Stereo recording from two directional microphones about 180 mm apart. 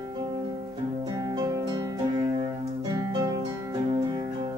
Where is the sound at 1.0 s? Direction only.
20° right (ahead or behind).